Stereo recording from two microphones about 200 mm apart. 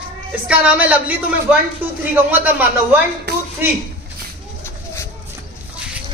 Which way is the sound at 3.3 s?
55° right (ahead or behind).